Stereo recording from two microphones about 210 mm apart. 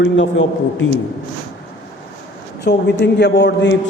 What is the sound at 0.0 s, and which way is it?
Speech, 65° left (ahead or behind).